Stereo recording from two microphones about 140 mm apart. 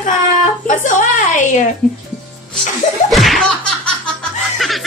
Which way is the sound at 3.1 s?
Centre (ahead or behind).